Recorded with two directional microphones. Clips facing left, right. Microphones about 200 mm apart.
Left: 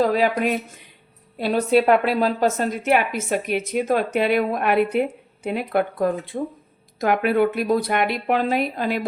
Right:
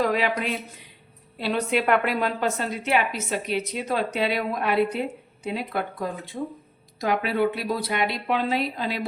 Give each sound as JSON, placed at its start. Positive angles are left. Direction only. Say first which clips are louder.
{"t": 0.1, "sound": "a woman's voice", "louder": "left 5 dB", "side_deg": 45}
{"t": 2.6, "sound": "a woman's voice", "louder": "left 4 dB", "side_deg": 50}